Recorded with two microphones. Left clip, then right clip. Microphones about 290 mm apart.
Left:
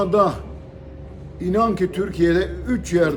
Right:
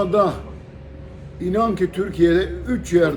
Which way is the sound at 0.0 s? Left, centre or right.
Centre.